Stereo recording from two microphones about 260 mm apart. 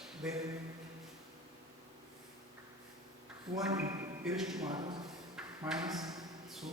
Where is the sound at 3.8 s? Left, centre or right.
Centre.